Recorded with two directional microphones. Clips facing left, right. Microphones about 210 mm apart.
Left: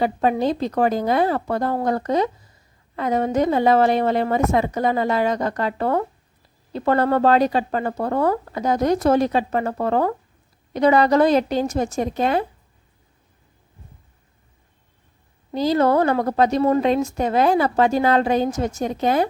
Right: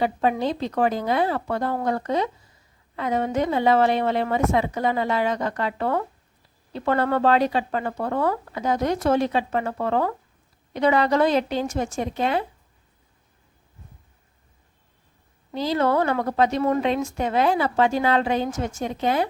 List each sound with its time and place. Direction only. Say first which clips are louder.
0.0 s a woman's voice: left 3 dB; 40° left (ahead or behind)
15.5 s a woman's voice: left 4 dB; 40° left (ahead or behind)